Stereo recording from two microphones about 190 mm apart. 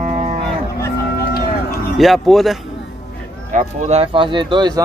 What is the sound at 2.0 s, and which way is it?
Speech, centre (ahead or behind).